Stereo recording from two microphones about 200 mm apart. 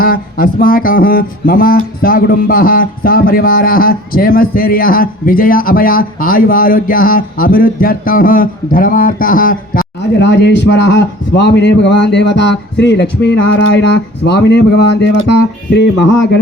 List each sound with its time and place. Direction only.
0.0 s speech: 45° left (ahead or behind)
10.2 s a man's voice: 60° left (ahead or behind)